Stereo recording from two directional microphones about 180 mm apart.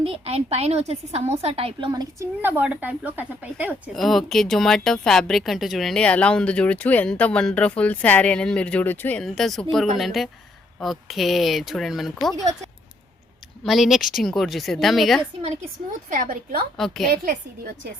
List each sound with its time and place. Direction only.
0.0 s a woman's voice: 30° right (ahead or behind)
1.9 s a woman's voice: 20° right (ahead or behind)
3.9 s speech: centre (ahead or behind)
13.7 s speech: centre (ahead or behind)
16.1 s a woman's voice: 50° right (ahead or behind)
16.7 s speech: centre (ahead or behind)